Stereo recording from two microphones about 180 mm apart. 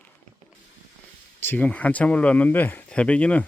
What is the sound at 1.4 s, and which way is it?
Speech, 10° left (ahead or behind).